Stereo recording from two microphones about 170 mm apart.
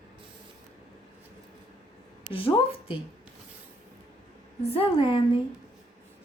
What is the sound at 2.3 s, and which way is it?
Speech, 35° left (ahead or behind).